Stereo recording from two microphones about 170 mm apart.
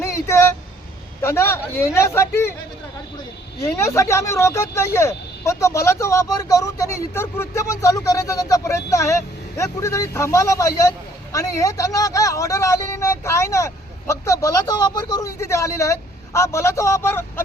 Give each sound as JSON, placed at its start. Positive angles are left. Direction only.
{"t": 0.0, "sound": "a sound", "side_deg": 15}
{"t": 1.2, "sound": "speech", "side_deg": 15}
{"t": 3.6, "sound": "speech", "side_deg": 15}